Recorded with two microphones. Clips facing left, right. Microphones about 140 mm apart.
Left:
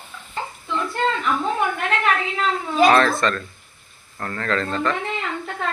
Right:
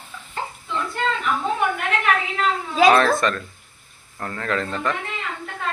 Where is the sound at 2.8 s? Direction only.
10° right (ahead or behind).